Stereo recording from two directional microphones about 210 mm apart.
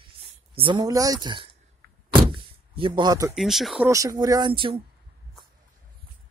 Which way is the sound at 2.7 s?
25° right (ahead or behind).